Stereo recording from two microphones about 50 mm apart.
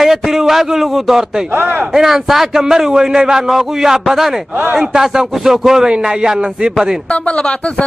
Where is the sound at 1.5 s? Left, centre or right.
Right.